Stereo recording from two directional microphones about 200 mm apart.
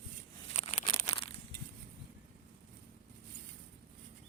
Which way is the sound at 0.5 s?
35° left (ahead or behind).